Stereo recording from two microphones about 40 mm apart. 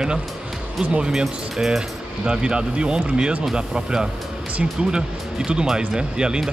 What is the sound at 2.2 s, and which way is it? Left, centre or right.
Speech, right.